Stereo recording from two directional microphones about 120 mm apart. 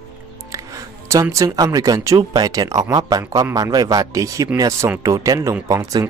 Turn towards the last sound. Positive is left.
turn(degrees=-30)  # may be behind; listen again after turning